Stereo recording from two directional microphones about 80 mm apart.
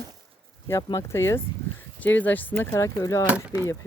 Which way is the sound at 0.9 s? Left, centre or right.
Left.